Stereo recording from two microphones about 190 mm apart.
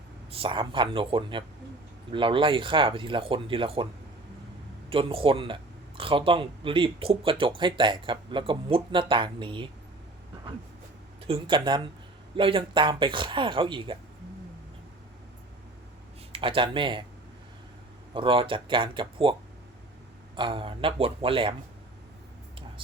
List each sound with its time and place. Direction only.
0.3 s speech: 30° right (ahead or behind)
4.9 s speech: 30° right (ahead or behind)
11.3 s speech: 25° right (ahead or behind)
16.3 s speech: 25° right (ahead or behind)
18.1 s speech: 25° right (ahead or behind)